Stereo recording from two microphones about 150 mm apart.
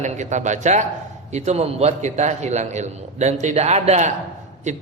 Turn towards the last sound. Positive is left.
turn(degrees=-50)  # may be behind; listen again after turning